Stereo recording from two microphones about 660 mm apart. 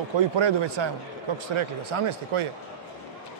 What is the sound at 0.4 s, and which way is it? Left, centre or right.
A man's voice, right.